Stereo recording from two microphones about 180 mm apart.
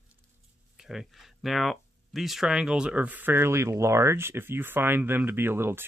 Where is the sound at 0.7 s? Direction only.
Centre (ahead or behind).